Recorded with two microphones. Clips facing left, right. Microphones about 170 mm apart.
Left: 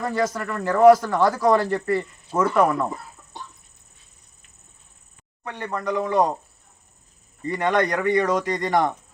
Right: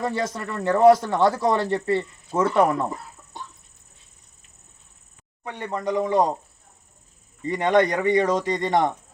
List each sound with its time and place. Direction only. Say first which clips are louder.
0.0 s a man's voice: left 2 dB; 25° right (ahead or behind)
5.5 s a man's voice: even; 20° right (ahead or behind)
7.4 s a man's voice: right 2 dB; 20° right (ahead or behind)